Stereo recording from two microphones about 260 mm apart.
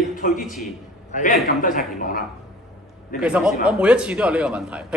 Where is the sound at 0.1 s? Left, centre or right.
Left.